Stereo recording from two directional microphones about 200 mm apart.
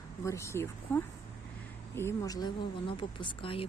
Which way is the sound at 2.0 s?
15° left (ahead or behind).